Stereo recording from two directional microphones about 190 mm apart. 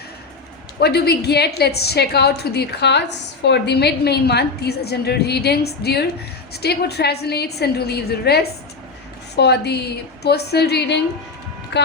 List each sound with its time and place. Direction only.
0.8 s a woman's voice: 60° left (ahead or behind)